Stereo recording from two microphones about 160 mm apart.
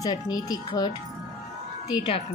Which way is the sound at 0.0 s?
25° left (ahead or behind).